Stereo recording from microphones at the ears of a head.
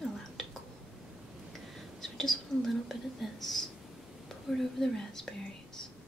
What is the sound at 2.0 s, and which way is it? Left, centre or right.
Speech, centre.